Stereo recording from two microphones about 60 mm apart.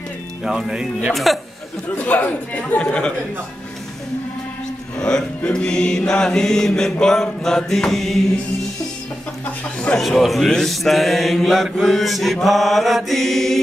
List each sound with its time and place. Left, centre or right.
0.4 s speech: centre
1.1 s mantra: centre
2.0 s speech: left
4.9 s mantra: centre
9.9 s mantra: centre